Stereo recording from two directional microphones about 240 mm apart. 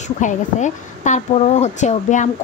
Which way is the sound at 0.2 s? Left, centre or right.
Left.